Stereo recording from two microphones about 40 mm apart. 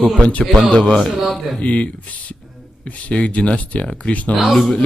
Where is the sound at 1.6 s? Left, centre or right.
Left.